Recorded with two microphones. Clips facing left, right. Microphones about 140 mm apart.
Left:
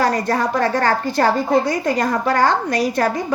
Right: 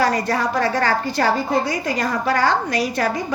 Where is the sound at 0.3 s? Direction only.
50° left (ahead or behind).